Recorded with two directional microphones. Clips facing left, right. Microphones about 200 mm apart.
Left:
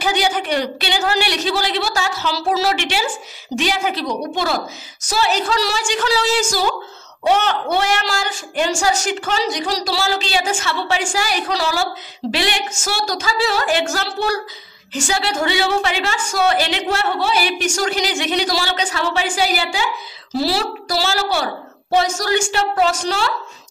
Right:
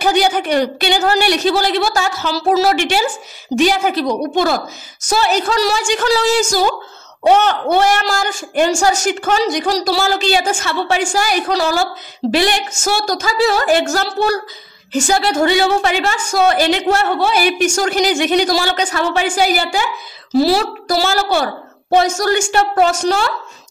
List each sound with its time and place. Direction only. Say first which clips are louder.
0.0 s a woman's voice: right 5 dB; 45° right (ahead or behind)